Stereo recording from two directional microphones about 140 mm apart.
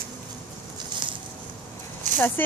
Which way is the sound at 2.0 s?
65° right (ahead or behind).